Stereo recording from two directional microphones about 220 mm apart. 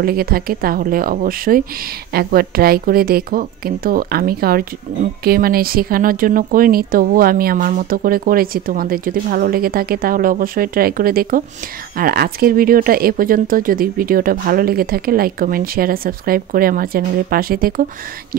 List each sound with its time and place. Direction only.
0.0 s a woman's voice: 45° right (ahead or behind)